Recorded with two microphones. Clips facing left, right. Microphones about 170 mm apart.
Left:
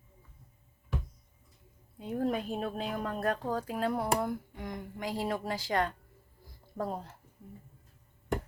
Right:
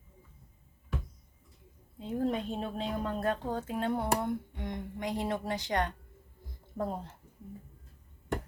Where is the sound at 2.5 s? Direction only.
25° right (ahead or behind).